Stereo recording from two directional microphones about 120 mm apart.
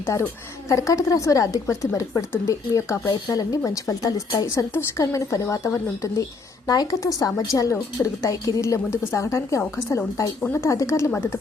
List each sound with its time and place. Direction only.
0.0 s a woman's voice: 20° left (ahead or behind)